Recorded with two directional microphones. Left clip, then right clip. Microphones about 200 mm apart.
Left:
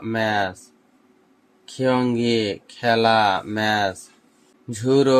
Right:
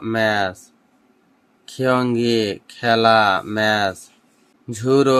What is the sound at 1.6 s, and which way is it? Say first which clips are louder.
Speech: right 2 dB; 20° right (ahead or behind).